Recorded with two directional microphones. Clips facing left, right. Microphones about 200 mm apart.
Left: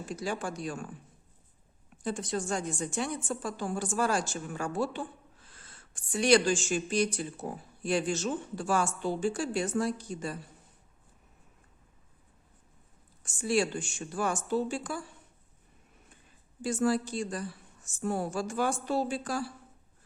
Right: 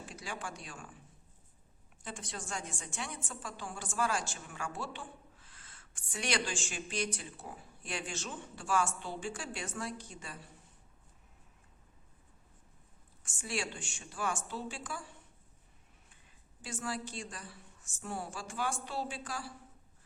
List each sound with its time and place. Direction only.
0.0 s speech: 40° left (ahead or behind)
2.0 s speech: 40° left (ahead or behind)
13.2 s speech: 35° left (ahead or behind)
16.6 s speech: 40° left (ahead or behind)